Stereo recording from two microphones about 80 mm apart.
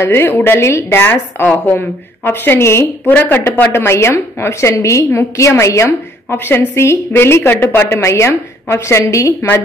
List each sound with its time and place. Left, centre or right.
0.0 s a woman's voice: left